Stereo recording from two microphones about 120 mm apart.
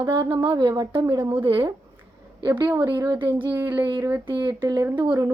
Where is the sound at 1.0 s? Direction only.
25° right (ahead or behind).